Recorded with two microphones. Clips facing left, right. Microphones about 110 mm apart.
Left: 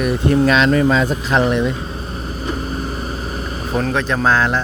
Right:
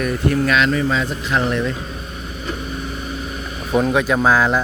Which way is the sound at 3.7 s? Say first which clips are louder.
Right 3 dB; 10° right (ahead or behind).